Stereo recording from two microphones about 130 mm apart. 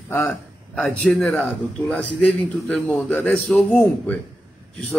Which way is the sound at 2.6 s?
10° left (ahead or behind).